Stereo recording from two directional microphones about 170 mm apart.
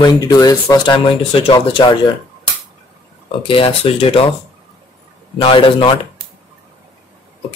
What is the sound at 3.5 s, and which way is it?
Speech, 30° left (ahead or behind).